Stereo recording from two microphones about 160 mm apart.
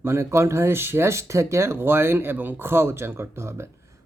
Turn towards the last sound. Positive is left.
turn(degrees=-15)  # may be behind; listen again after turning